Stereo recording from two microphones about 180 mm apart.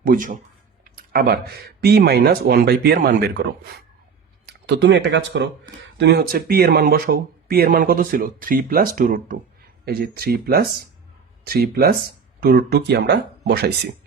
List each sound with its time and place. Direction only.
0.0 s speech: 50° right (ahead or behind)
4.4 s speech: 70° right (ahead or behind); by 9.4 s 45° right (ahead or behind)
9.8 s speech: 60° right (ahead or behind)